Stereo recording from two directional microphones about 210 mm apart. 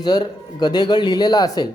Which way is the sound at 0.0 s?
20° left (ahead or behind).